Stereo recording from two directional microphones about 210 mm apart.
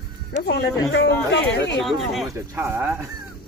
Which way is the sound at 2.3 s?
15° right (ahead or behind).